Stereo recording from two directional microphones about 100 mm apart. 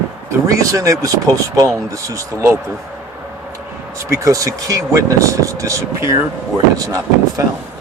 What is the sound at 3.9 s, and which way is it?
Speech, 30° right (ahead or behind).